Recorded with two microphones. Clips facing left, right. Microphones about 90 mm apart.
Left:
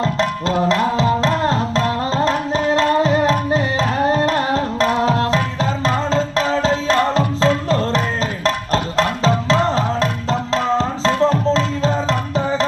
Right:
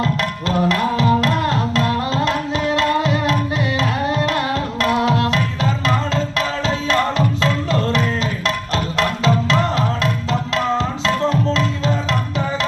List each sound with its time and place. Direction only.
0.0 s music: 30° left (ahead or behind)
0.7 s tabla: 25° left (ahead or behind)
8.4 s music: 35° left (ahead or behind)